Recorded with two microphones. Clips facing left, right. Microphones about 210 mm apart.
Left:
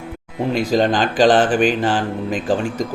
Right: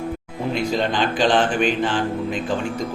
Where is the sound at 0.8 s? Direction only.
40° left (ahead or behind).